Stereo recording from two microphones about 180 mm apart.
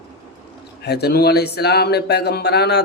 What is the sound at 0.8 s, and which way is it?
Mantra, 65° left (ahead or behind).